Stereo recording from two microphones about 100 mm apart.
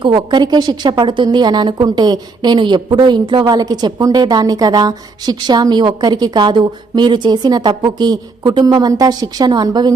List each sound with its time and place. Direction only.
0.0 s a woman's voice: 50° right (ahead or behind)